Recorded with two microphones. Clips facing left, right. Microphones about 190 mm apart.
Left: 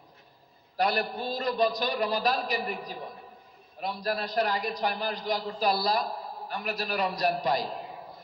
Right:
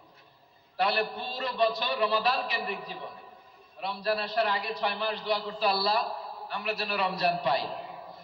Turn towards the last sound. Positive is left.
turn(degrees=40)  # may be behind; listen again after turning